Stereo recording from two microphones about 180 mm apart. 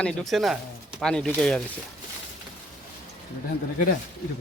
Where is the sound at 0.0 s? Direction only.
Centre (ahead or behind).